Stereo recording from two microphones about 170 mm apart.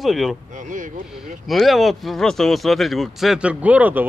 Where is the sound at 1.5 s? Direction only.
Centre (ahead or behind).